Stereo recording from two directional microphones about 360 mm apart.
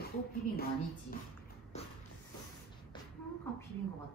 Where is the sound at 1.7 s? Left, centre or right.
Centre.